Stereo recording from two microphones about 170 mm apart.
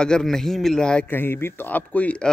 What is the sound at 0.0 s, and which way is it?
A man's voice, 5° left (ahead or behind).